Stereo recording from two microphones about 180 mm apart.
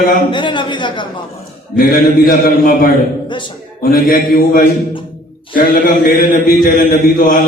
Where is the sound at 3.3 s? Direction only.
25° left (ahead or behind).